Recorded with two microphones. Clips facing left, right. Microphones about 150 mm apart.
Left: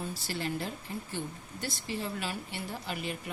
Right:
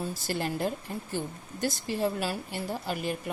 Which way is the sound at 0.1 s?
45° right (ahead or behind).